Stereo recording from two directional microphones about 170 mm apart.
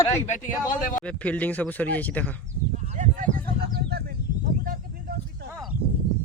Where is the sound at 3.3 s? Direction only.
70° right (ahead or behind).